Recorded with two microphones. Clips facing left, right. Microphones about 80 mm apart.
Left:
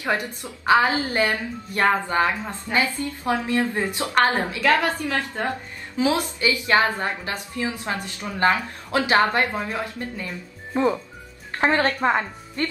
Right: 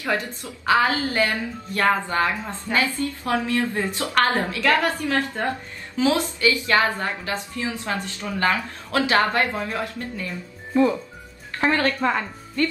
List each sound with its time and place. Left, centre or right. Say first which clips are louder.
0.0 s a woman's voice: even; centre